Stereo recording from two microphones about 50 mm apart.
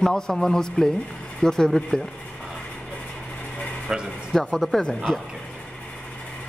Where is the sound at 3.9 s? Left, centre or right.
Centre.